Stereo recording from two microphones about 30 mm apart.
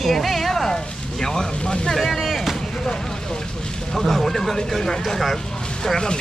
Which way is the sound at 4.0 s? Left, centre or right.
Centre.